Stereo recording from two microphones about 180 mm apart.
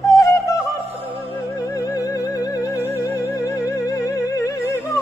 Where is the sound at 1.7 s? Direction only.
20° left (ahead or behind).